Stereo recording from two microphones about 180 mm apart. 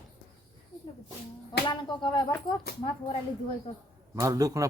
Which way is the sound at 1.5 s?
25° left (ahead or behind).